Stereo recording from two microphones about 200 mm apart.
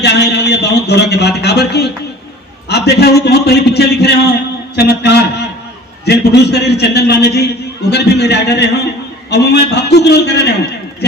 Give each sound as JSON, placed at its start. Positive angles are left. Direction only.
{"t": 0.0, "sound": "a man's voice", "side_deg": 55}